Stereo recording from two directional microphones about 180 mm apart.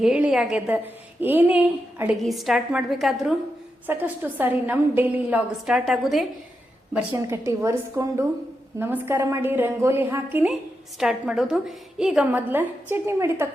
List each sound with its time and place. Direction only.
0.0 s a woman's voice: 5° right (ahead or behind)
7.1 s a woman's voice: 15° right (ahead or behind)